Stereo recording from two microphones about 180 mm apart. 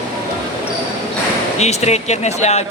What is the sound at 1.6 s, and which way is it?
Speech, 35° left (ahead or behind).